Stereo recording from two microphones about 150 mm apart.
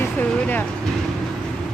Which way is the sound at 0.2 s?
10° left (ahead or behind).